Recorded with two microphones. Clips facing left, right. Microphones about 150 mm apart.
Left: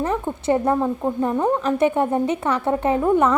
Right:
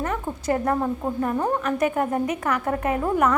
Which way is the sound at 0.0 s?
25° left (ahead or behind).